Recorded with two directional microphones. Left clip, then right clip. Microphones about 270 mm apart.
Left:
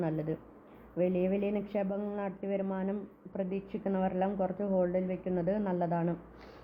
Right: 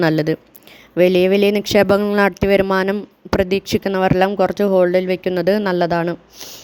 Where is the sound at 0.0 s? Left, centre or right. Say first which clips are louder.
Right 18 dB; right.